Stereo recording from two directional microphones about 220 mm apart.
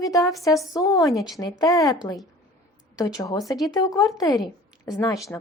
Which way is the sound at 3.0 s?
15° left (ahead or behind).